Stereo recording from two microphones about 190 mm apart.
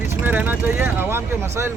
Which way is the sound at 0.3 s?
10° right (ahead or behind).